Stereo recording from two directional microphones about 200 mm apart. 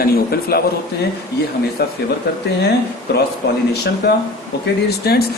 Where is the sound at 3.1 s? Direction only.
55° left (ahead or behind).